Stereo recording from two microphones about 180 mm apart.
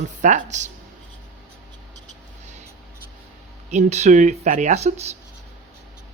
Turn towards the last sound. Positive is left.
turn(degrees=-35)  # may be behind; listen again after turning